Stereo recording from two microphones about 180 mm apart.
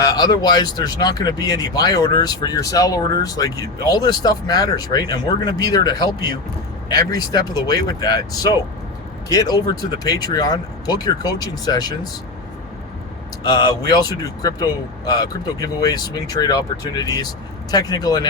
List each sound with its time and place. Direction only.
0.0 s speech: 20° left (ahead or behind)
13.4 s speech: 20° left (ahead or behind)